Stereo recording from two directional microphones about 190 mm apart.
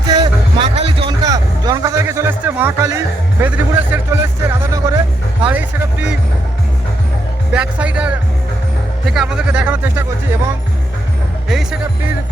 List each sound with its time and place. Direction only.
0.1 s music: 20° right (ahead or behind)
0.8 s a sound: 30° right (ahead or behind)
1.2 s music: 20° right (ahead or behind)
7.5 s speech: 5° right (ahead or behind)